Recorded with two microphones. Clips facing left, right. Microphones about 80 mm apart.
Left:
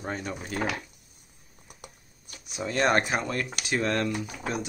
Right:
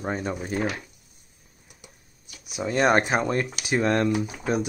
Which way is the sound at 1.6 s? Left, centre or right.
Left.